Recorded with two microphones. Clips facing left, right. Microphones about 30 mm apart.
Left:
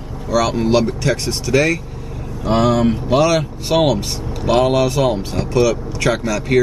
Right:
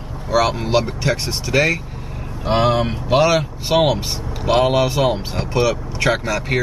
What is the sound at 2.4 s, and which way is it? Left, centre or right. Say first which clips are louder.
Speech: left 2 dB; right.